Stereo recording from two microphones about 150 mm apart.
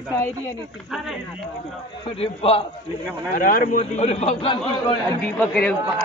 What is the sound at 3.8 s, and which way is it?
Speech, 45° left (ahead or behind).